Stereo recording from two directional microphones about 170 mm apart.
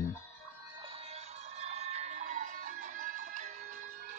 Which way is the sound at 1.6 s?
40° right (ahead or behind).